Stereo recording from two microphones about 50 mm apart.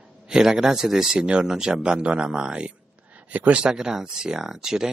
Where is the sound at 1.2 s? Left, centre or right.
Centre.